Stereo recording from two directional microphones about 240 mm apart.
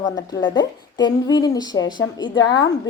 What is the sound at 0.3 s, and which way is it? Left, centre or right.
A woman's voice, centre.